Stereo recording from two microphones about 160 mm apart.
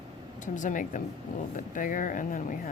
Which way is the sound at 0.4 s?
50° left (ahead or behind).